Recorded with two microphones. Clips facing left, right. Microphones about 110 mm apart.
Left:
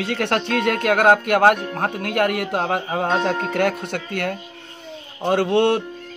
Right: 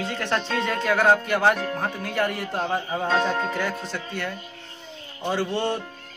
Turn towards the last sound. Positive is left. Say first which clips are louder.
# left 8 dB
turn(degrees=70)  # may be behind; listen again after turning